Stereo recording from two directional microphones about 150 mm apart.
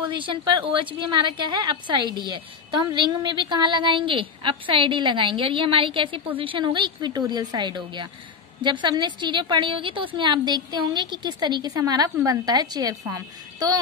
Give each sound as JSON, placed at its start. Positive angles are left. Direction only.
{"t": 0.1, "sound": "a woman's voice", "side_deg": -35}